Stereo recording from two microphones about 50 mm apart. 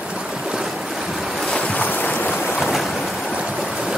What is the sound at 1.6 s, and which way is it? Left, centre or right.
Boat, left.